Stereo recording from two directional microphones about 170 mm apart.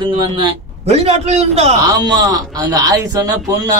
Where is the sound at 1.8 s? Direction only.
20° right (ahead or behind).